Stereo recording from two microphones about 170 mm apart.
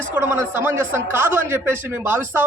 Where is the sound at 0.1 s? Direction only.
10° right (ahead or behind).